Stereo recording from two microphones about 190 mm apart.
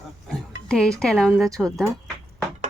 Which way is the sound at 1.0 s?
5° left (ahead or behind).